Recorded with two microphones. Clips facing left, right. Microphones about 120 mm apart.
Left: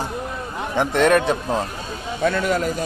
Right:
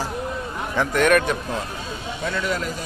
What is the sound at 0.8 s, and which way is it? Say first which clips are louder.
Speech: left 2 dB; 30° left (ahead or behind).